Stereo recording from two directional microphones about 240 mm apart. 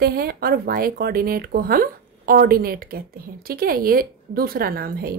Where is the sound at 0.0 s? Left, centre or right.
Right.